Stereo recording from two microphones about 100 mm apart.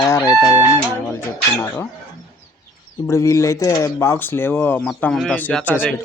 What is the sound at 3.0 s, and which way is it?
Speech, 30° left (ahead or behind).